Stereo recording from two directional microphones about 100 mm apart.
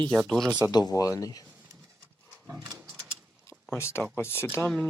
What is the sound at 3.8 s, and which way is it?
Speech, 25° left (ahead or behind).